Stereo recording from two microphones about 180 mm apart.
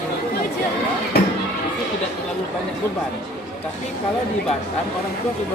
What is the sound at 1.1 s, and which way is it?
Music, 60° left (ahead or behind).